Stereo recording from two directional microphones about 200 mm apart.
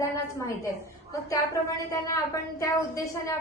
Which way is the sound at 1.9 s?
15° left (ahead or behind).